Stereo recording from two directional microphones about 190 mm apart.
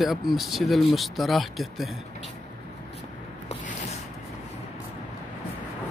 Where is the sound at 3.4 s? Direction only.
35° left (ahead or behind).